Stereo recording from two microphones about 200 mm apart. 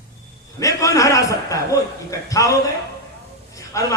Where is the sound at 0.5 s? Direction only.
15° left (ahead or behind).